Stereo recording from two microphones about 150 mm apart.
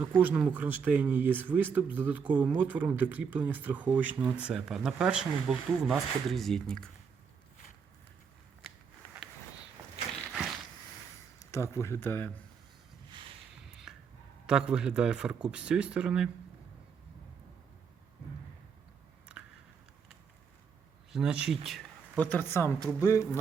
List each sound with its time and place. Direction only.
0.0 s speech: 10° right (ahead or behind); by 6.9 s 5° left (ahead or behind)
11.5 s speech: 20° left (ahead or behind)
13.7 s a sound: 5° right (ahead or behind)
14.4 s speech: 5° right (ahead or behind)
19.4 s a sound: 5° right (ahead or behind)
21.1 s speech: 5° right (ahead or behind)
22.2 s speech: 10° left (ahead or behind)